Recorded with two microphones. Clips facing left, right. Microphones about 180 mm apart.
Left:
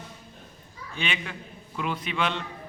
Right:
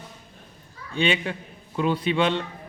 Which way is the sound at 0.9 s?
30° right (ahead or behind).